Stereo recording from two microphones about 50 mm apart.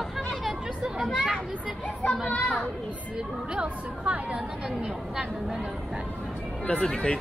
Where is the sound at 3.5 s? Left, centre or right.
Right.